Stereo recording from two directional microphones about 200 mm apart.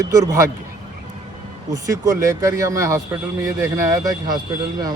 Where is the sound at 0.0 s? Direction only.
15° right (ahead or behind).